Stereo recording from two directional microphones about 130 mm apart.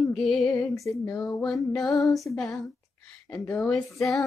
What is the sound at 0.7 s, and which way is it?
Music, 25° left (ahead or behind).